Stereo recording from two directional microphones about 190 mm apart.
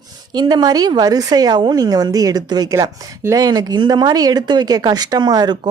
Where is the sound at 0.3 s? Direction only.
20° right (ahead or behind).